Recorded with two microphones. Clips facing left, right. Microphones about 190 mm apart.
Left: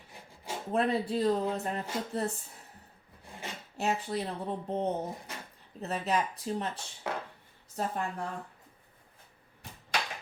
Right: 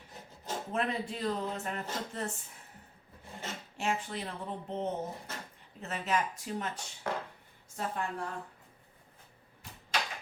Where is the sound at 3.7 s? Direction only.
40° left (ahead or behind).